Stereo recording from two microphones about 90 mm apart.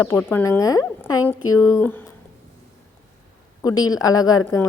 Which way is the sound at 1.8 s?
20° left (ahead or behind).